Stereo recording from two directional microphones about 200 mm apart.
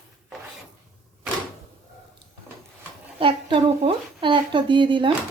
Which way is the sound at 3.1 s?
25° right (ahead or behind).